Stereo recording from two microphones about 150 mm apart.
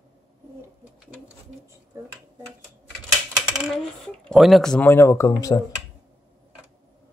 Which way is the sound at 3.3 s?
5° right (ahead or behind).